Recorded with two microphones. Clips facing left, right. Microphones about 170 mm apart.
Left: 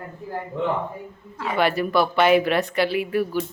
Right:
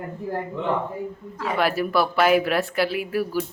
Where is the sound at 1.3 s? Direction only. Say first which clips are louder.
Left 1 dB; centre (ahead or behind).